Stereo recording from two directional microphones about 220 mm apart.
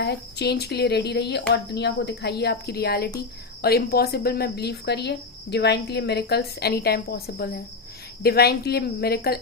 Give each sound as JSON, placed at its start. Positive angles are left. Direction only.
{"t": 0.0, "sound": "speech", "side_deg": 50}